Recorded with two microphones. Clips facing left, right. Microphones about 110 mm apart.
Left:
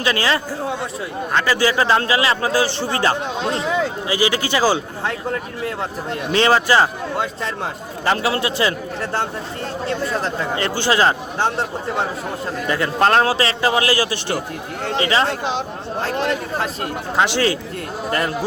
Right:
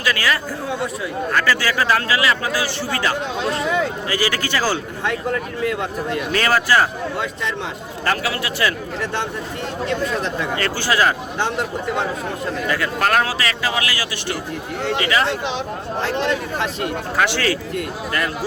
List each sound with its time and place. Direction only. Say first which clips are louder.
0.0 s speech: left 2 dB; 25° left (ahead or behind)
4.1 s speech: left 5 dB; 20° left (ahead or behind)
5.6 s speech: right 3 dB; 30° left (ahead or behind)
9.8 s speech: even; 35° left (ahead or behind)
10.6 s speech: left 2 dB; 25° left (ahead or behind)
12.6 s speech: left 4 dB; 25° left (ahead or behind)
17.2 s speech: left 2 dB; 20° left (ahead or behind)
17.7 s speech: left 1 dB; 30° left (ahead or behind)